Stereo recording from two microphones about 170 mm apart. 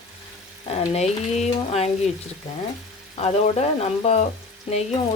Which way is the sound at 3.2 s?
35° left (ahead or behind).